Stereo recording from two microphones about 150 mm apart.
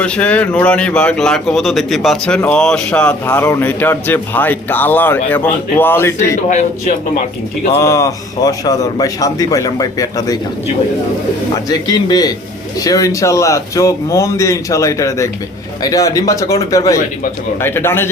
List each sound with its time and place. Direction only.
0.0 s a man's voice: 10° left (ahead or behind)
3.2 s a man's voice: 20° left (ahead or behind)
6.5 s a man's voice: 50° left (ahead or behind)
7.8 s a man's voice: 20° left (ahead or behind)
11.7 s a man's voice: 25° left (ahead or behind)